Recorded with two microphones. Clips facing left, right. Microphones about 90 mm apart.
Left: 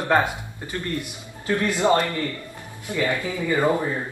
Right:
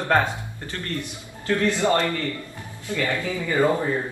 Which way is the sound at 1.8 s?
20° left (ahead or behind).